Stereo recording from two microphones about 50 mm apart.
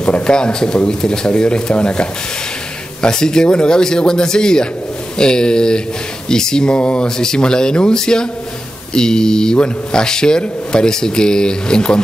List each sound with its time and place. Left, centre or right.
0.0 s a man's voice: centre